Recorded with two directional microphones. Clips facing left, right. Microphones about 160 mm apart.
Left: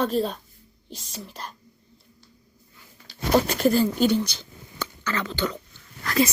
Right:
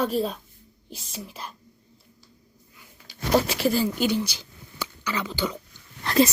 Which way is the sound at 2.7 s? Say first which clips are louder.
Left 1 dB; 5° right (ahead or behind).